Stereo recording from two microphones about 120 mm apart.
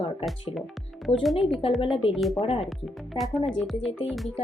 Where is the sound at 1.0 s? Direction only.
Centre (ahead or behind).